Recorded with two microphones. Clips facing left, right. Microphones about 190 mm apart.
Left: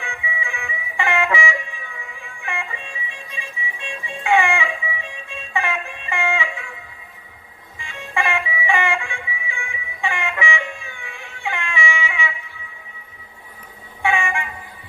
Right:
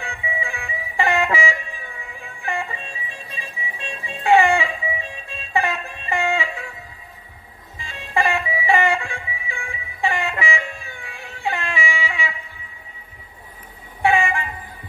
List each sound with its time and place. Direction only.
0.0 s music: 40° right (ahead or behind)
7.8 s music: 35° right (ahead or behind)
14.0 s vehicle: 35° right (ahead or behind)